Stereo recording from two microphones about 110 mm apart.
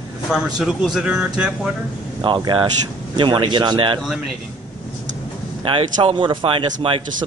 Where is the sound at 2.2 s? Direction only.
50° right (ahead or behind).